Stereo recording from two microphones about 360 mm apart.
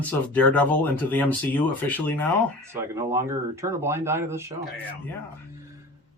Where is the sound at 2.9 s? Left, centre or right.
Centre.